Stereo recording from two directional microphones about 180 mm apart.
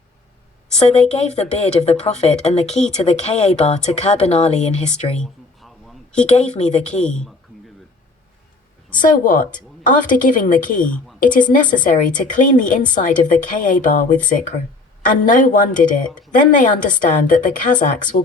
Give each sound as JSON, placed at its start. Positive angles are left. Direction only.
{"t": 0.8, "sound": "speech", "side_deg": 35}
{"t": 5.1, "sound": "a sound", "side_deg": 0}
{"t": 6.3, "sound": "speech", "side_deg": 40}
{"t": 7.0, "sound": "speech", "side_deg": 5}
{"t": 9.0, "sound": "a woman's voice", "side_deg": 45}
{"t": 10.8, "sound": "a woman's voice", "side_deg": 5}
{"t": 11.2, "sound": "a woman's voice", "side_deg": 45}
{"t": 16.0, "sound": "speech", "side_deg": 5}
{"t": 16.3, "sound": "a woman's voice", "side_deg": 45}